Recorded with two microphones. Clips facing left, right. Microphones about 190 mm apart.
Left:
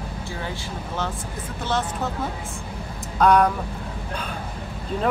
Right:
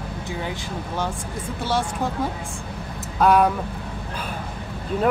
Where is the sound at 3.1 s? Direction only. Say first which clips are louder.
Even; 5° right (ahead or behind).